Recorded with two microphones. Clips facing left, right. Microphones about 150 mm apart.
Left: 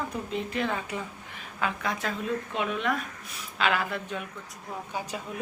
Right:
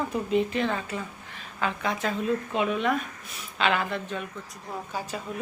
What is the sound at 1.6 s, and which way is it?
A woman's voice, centre (ahead or behind).